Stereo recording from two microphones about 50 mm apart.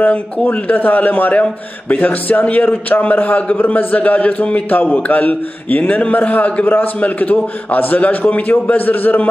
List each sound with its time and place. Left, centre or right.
0.0 s a man's voice: left